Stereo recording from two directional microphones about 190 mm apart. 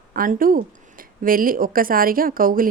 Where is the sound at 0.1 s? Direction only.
50° right (ahead or behind).